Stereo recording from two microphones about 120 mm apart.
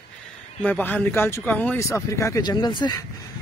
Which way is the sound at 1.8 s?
25° left (ahead or behind).